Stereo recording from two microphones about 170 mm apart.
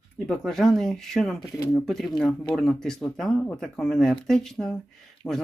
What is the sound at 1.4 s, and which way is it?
Speech, 20° left (ahead or behind).